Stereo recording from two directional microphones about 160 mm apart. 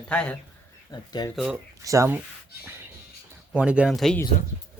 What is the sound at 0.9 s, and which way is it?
Speech, 25° left (ahead or behind).